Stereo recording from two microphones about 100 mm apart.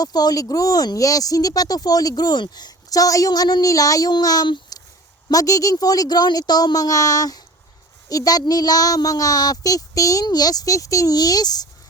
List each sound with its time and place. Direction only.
0.0 s speech: 40° left (ahead or behind)
4.4 s a sound: 50° left (ahead or behind)
5.3 s speech: 35° left (ahead or behind)